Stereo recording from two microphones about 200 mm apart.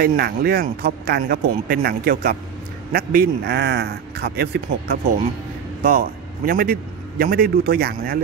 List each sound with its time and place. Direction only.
0.0 s a man's voice: 50° right (ahead or behind)